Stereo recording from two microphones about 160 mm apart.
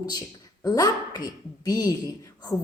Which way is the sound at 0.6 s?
25° left (ahead or behind).